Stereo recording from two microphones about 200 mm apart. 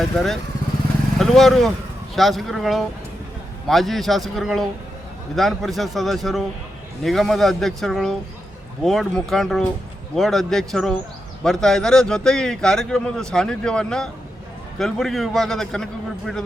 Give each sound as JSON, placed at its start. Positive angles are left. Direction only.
{"t": 0.1, "sound": "a man's voice", "side_deg": 0}